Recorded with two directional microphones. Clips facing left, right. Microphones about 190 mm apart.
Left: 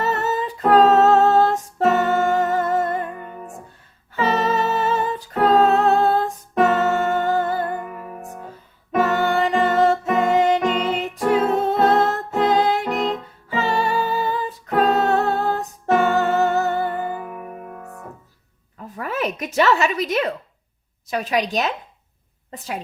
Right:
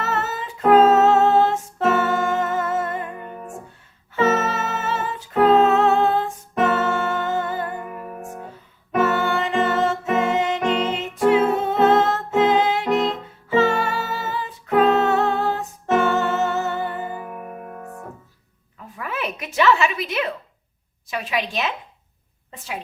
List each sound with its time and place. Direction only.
0.0 s humming: 35° left (ahead or behind)
4.2 s music: 35° left (ahead or behind)
5.4 s humming: 35° left (ahead or behind)
6.9 s music: 40° left (ahead or behind)
9.0 s music: 40° left (ahead or behind)
13.8 s humming: 35° left (ahead or behind)
17.2 s music: centre (ahead or behind)
18.9 s a sound: 40° left (ahead or behind)
21.1 s a woman's voice: 40° left (ahead or behind)